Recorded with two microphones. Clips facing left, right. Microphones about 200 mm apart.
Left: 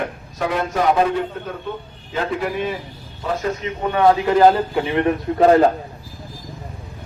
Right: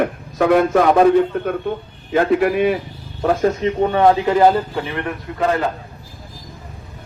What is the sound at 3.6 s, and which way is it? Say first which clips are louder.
Speech: right 8 dB; 30° right (ahead or behind).